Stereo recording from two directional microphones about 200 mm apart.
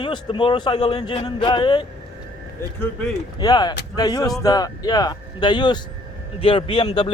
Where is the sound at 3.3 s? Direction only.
20° left (ahead or behind).